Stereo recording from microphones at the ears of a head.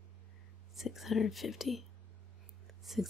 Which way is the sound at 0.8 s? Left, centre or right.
Left.